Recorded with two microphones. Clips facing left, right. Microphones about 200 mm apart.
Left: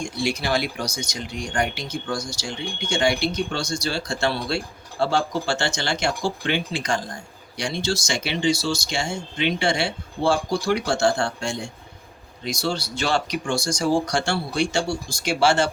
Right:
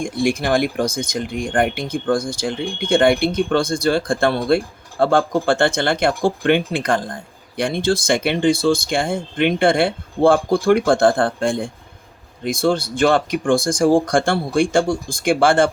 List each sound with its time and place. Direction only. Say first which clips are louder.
0.0 s speech: right 6 dB; 50° right (ahead or behind)